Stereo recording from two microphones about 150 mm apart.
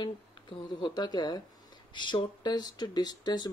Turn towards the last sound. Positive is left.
turn(degrees=25)  # may be behind; listen again after turning